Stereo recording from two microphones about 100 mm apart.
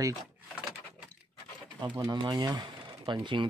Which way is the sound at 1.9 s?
45° right (ahead or behind).